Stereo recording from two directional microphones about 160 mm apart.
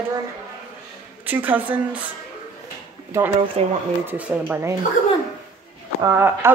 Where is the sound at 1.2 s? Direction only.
10° right (ahead or behind).